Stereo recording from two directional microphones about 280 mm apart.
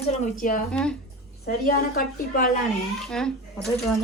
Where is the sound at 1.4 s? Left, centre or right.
Left.